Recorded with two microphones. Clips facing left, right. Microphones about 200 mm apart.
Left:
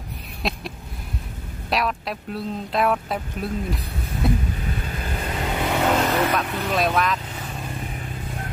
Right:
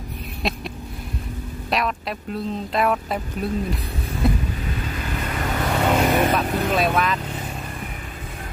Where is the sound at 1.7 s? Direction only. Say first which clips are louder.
Even; centre (ahead or behind).